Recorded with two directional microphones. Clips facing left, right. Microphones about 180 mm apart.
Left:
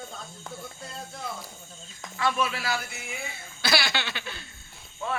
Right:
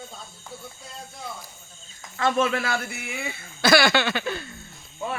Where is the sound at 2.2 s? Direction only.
45° right (ahead or behind).